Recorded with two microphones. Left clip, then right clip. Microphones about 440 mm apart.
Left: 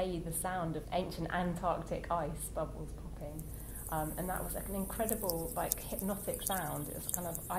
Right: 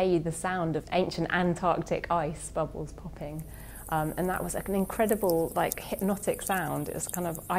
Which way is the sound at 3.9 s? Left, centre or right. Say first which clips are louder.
Right 8 dB; right.